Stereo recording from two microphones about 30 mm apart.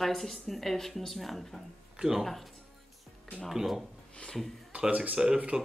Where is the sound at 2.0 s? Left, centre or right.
Centre.